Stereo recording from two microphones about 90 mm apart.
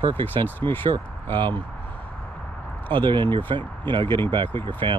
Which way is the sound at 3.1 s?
65° right (ahead or behind).